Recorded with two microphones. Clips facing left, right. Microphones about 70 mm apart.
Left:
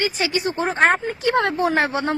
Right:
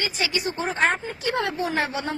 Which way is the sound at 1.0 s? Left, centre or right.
Left.